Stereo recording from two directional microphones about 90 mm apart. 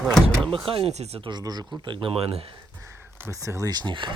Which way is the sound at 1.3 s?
50° right (ahead or behind).